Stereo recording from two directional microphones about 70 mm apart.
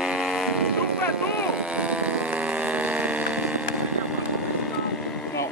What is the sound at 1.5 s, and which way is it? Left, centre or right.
Vehicle, centre.